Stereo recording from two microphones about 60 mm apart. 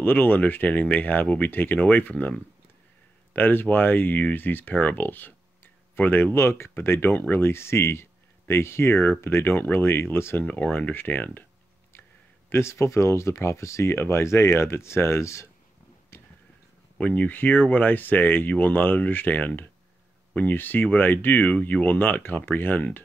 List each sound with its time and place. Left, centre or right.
0.0 s speech: left
3.3 s speech: left
10.4 s speech: left
12.4 s speech: left
17.0 s speech: left